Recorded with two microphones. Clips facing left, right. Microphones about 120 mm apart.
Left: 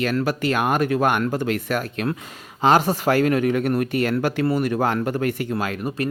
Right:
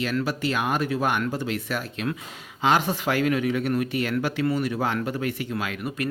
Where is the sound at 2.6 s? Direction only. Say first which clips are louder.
Left 5 dB; 40° left (ahead or behind).